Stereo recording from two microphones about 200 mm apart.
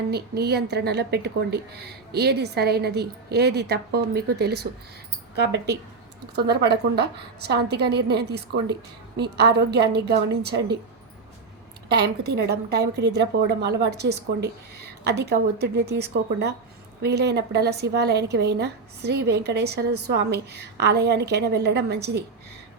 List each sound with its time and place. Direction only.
0.1 s a woman's voice: 55° right (ahead or behind)
11.9 s a woman's voice: 55° right (ahead or behind)